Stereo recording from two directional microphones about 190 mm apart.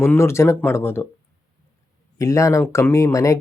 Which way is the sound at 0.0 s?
10° left (ahead or behind).